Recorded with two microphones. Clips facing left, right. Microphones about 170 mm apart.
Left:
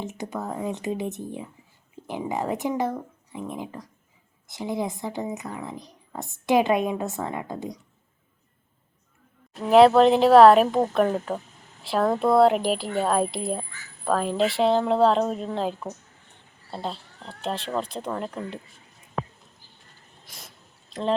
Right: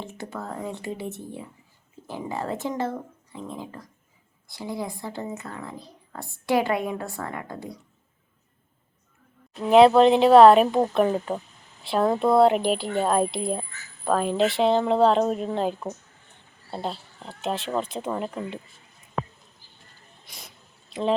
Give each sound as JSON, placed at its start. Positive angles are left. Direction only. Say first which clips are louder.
{"t": 0.0, "sound": "a woman's voice", "louder": "left 3 dB", "side_deg": 20}
{"t": 9.6, "sound": "speech", "louder": "even", "side_deg": 0}
{"t": 20.2, "sound": "snake", "louder": "even", "side_deg": 0}
{"t": 20.9, "sound": "speech", "louder": "right 1 dB", "side_deg": -5}